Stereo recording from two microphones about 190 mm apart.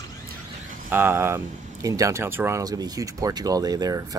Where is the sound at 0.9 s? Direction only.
10° right (ahead or behind).